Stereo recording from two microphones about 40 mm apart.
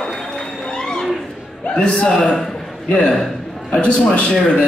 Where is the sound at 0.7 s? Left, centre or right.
Centre.